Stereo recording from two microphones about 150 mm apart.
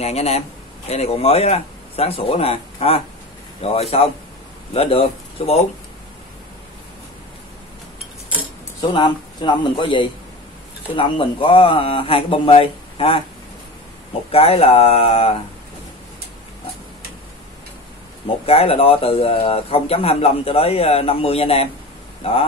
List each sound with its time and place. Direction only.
0.0 s speech: 45° left (ahead or behind)
8.9 s speech: 30° left (ahead or behind)
14.3 s speech: 40° left (ahead or behind)
18.2 s speech: 40° left (ahead or behind)